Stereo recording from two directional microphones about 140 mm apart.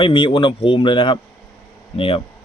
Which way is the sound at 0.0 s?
40° left (ahead or behind).